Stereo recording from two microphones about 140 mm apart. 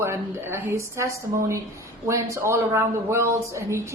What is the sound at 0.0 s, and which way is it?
Speech, 20° right (ahead or behind).